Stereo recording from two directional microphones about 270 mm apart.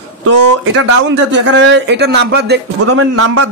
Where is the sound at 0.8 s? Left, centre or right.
Right.